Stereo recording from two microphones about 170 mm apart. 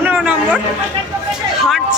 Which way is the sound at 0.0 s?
10° right (ahead or behind).